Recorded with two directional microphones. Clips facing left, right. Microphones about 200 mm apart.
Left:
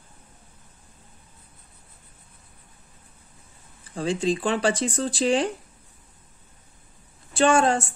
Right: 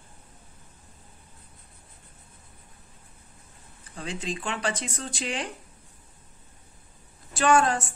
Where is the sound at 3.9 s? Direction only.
30° left (ahead or behind).